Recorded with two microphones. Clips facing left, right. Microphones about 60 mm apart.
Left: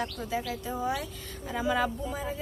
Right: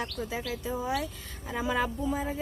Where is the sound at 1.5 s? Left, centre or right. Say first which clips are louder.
Left 1 dB; right.